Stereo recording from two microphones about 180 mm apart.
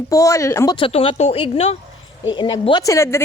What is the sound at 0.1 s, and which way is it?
Speech, 20° left (ahead or behind).